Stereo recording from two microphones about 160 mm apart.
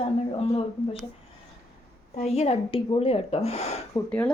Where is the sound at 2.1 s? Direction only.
45° left (ahead or behind).